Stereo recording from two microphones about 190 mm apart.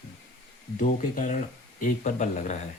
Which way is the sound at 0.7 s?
40° left (ahead or behind).